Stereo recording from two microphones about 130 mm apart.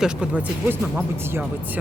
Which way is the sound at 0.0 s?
5° right (ahead or behind).